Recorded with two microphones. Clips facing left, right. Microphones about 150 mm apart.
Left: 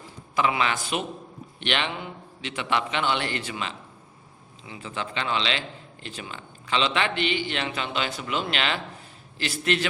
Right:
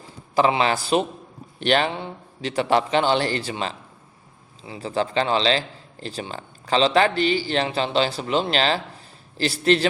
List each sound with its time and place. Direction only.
0.3 s a man's voice: 35° right (ahead or behind)